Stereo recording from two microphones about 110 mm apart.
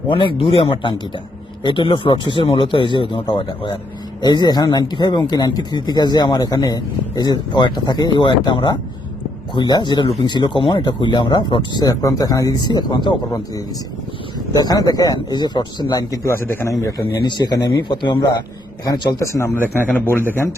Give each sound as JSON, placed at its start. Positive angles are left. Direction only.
{"t": 0.1, "sound": "speech", "side_deg": 50}
{"t": 14.3, "sound": "speech", "side_deg": 35}
{"t": 16.3, "sound": "speech", "side_deg": 20}
{"t": 17.2, "sound": "speech", "side_deg": 40}
{"t": 18.9, "sound": "speech", "side_deg": 30}